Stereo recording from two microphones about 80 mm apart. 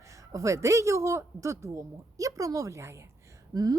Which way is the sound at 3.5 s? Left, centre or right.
Right.